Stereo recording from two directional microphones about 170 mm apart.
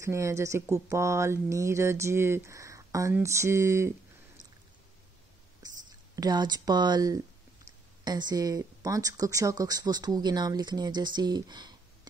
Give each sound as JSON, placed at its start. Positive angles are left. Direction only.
{"t": 0.0, "sound": "speech", "side_deg": -15}
{"t": 6.1, "sound": "speech", "side_deg": -25}